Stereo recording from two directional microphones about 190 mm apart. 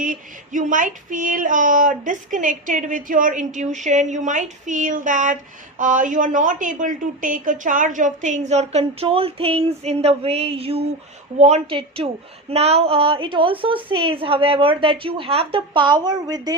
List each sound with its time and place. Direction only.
0.0 s a woman's voice: 45° right (ahead or behind); by 16.6 s 20° right (ahead or behind)